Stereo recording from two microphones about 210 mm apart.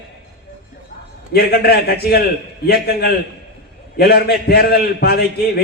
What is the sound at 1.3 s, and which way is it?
A man's voice, 50° left (ahead or behind).